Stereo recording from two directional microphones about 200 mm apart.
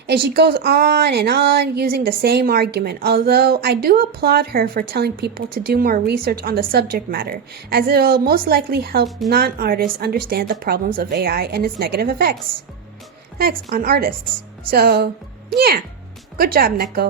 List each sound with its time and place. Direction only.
0.1 s speech: 50° right (ahead or behind)
13.4 s speech: 45° right (ahead or behind)